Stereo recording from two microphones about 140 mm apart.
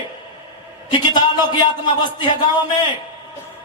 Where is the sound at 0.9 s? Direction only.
30° left (ahead or behind).